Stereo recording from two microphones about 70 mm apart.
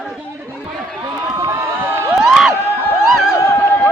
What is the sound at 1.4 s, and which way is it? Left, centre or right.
Crowd, right.